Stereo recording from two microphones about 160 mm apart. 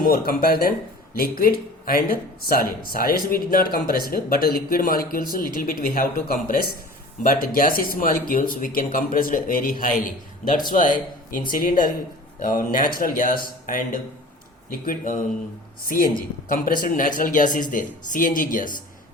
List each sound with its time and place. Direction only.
0.0 s speech: 65° left (ahead or behind)